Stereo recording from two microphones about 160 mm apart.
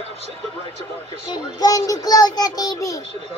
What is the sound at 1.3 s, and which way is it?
Child singing, 25° left (ahead or behind).